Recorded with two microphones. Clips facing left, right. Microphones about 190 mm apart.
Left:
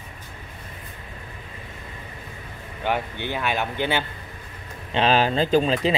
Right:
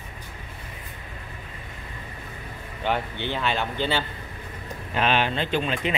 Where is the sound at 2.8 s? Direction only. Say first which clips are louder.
Left 1 dB; 10° left (ahead or behind).